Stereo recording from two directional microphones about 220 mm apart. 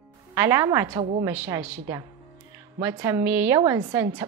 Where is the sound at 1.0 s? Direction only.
25° right (ahead or behind).